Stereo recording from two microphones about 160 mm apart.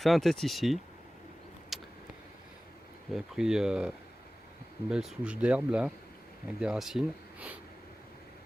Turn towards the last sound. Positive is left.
turn(degrees=-5)  # may be behind; listen again after turning